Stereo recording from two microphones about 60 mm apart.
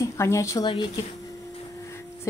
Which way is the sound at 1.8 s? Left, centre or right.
Left.